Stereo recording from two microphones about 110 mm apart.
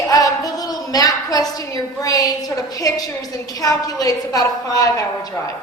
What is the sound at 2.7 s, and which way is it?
A woman's voice, 35° left (ahead or behind).